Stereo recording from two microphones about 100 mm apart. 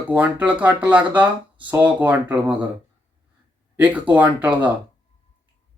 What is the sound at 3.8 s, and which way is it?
Speech, 15° right (ahead or behind).